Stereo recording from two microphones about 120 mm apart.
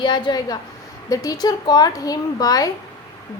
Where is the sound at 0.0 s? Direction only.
40° left (ahead or behind).